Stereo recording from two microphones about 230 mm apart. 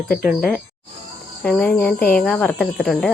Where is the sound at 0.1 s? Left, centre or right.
Left.